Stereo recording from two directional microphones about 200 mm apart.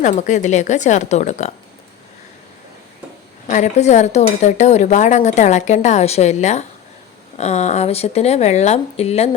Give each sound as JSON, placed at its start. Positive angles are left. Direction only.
{"t": 0.0, "sound": "speech", "side_deg": 40}
{"t": 3.4, "sound": "speech", "side_deg": 35}